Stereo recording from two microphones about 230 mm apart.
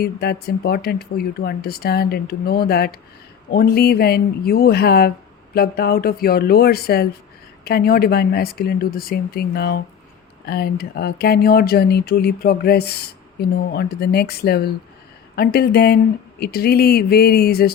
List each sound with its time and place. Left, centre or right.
0.0 s a woman's voice: left